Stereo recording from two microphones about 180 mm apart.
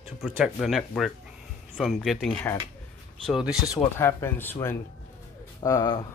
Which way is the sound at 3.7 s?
15° left (ahead or behind).